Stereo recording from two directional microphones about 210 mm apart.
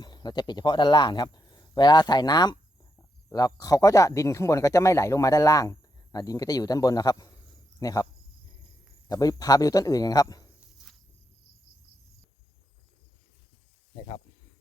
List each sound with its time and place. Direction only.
0.0 s speech: 20° left (ahead or behind)
9.0 s speech: 15° left (ahead or behind)